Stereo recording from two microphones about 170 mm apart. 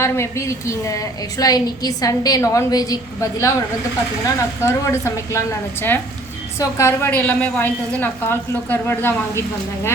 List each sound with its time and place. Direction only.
0.0 s a woman's voice: 15° left (ahead or behind)
4.6 s a woman's voice: 15° left (ahead or behind)